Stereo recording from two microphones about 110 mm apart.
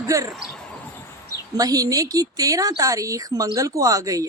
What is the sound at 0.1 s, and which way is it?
Speech, 30° right (ahead or behind).